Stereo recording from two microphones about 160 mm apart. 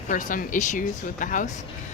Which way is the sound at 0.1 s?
55° left (ahead or behind).